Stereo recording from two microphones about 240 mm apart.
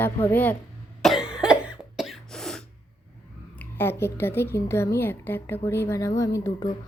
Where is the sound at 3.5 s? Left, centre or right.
Centre.